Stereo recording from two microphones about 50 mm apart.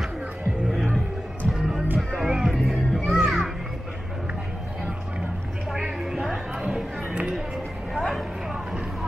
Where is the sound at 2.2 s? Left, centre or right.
Centre.